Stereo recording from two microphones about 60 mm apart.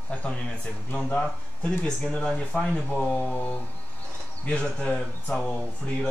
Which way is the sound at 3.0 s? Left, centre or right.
Left.